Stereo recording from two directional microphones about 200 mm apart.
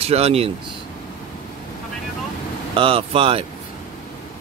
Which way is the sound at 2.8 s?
30° right (ahead or behind).